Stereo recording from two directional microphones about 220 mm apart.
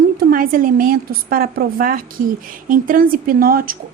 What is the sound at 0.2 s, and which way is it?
A woman's voice, 40° right (ahead or behind).